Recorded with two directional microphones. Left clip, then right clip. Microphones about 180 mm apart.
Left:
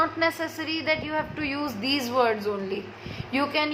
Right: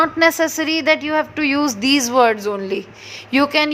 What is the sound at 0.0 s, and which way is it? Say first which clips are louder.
A woman's voice: right 10 dB; 60° right (ahead or behind).